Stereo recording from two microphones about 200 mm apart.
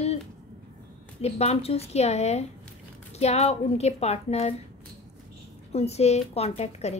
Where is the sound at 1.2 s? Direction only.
30° left (ahead or behind).